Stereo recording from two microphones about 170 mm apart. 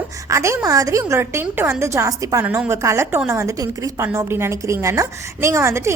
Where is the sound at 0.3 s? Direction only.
15° right (ahead or behind).